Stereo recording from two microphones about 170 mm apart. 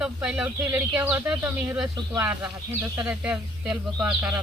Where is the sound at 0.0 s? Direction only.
5° right (ahead or behind).